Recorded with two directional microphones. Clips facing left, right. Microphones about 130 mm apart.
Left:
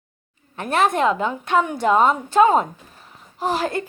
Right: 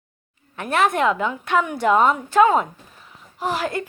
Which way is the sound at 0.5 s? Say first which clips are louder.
Left 1 dB; 30° left (ahead or behind).